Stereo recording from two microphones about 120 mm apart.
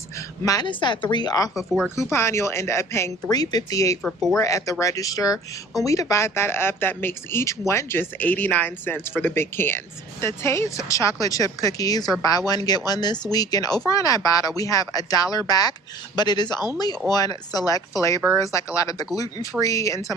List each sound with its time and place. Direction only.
0.4 s speech: 30° left (ahead or behind)
0.7 s speech: 40° left (ahead or behind)
4.0 s speech: 5° left (ahead or behind)
4.4 s speech: 25° left (ahead or behind)